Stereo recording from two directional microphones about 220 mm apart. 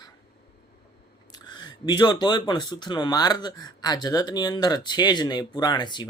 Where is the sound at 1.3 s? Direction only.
20° left (ahead or behind).